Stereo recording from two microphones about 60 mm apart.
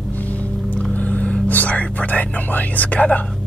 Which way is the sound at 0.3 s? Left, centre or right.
Left.